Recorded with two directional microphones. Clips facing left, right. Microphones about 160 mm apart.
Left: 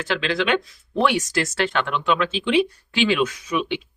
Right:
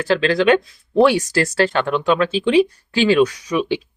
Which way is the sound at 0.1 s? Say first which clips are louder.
Right 7 dB; 35° right (ahead or behind).